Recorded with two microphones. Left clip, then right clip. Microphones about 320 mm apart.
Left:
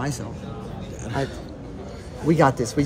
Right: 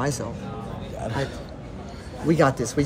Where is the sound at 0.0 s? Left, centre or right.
Centre.